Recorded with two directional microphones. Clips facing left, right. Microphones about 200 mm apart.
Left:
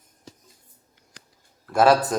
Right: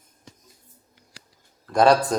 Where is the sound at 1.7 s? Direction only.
5° left (ahead or behind).